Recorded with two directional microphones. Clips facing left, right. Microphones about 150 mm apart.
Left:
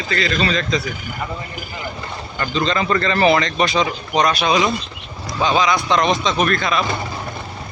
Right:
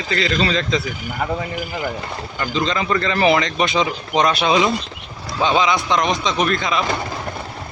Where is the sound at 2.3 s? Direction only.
15° right (ahead or behind).